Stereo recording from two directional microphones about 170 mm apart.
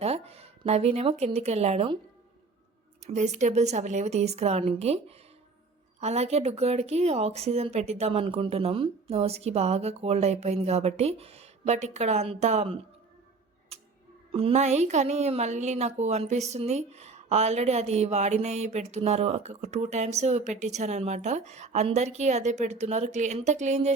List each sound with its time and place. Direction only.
0.0 s speech: 35° right (ahead or behind)
3.1 s a woman's voice: 45° right (ahead or behind)
14.3 s a woman's voice: 35° right (ahead or behind)